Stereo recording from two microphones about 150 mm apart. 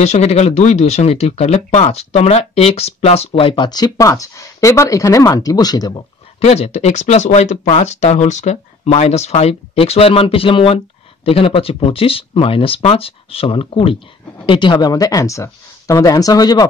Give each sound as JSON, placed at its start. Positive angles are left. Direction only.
{"t": 0.0, "sound": "speech", "side_deg": 50}
{"t": 6.4, "sound": "speech", "side_deg": 45}